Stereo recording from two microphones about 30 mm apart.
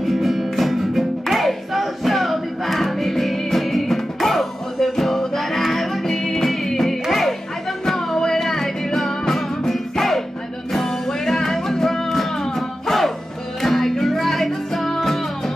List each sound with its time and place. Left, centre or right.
0.0 s music: centre
12.1 s music: centre